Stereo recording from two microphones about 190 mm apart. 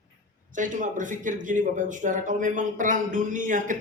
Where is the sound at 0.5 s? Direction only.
40° right (ahead or behind).